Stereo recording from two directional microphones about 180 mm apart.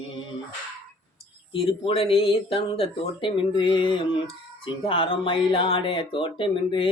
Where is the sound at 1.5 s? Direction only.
30° left (ahead or behind).